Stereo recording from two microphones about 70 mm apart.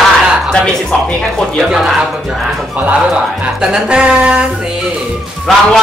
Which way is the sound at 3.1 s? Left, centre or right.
Centre.